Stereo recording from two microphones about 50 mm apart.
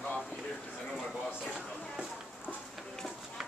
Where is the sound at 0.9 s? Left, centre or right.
Centre.